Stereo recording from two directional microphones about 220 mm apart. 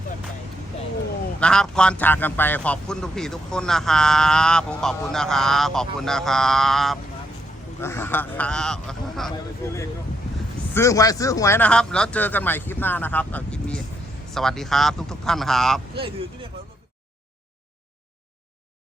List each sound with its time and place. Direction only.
1.4 s a man's voice: 5° left (ahead or behind)
9.6 s a man's voice: 15° left (ahead or behind)
16.0 s speech: 25° right (ahead or behind)